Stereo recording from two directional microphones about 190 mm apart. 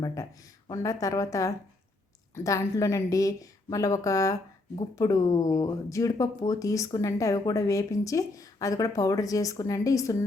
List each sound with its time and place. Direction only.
0.0 s speech: 20° left (ahead or behind)